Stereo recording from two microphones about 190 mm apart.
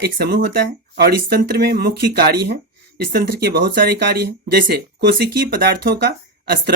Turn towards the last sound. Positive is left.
turn(degrees=-55)  # may be behind; listen again after turning